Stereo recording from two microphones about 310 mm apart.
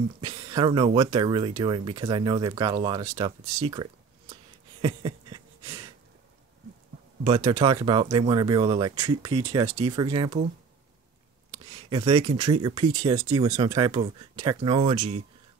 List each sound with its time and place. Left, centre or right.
0.2 s speech: centre
4.8 s a sound: centre
7.2 s speech: centre
11.5 s speech: centre